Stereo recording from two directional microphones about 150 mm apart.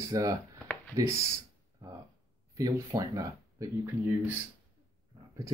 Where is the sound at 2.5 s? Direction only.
20° right (ahead or behind).